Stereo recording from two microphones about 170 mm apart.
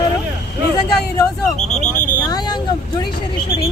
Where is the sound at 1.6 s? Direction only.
45° left (ahead or behind).